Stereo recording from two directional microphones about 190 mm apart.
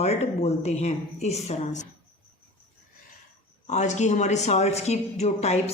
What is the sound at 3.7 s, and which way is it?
Speech, 40° left (ahead or behind).